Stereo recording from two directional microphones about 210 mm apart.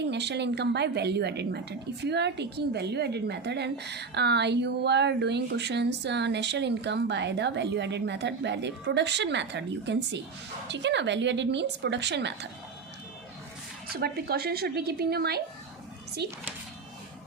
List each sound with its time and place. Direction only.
0.1 s a woman's voice: 55° right (ahead or behind)
13.9 s a woman's voice: 50° right (ahead or behind)